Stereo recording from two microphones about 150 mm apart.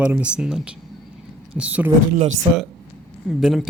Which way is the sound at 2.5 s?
45° right (ahead or behind).